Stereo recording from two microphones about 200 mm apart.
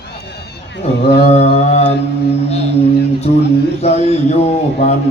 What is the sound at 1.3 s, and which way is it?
Speech, 30° left (ahead or behind).